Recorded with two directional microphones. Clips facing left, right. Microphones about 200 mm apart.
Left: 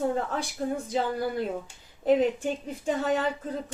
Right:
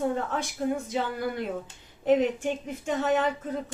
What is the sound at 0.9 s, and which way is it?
Speech, 35° left (ahead or behind).